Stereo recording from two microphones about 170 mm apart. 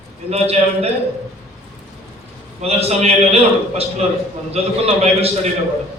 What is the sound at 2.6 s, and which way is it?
Speech, 35° right (ahead or behind).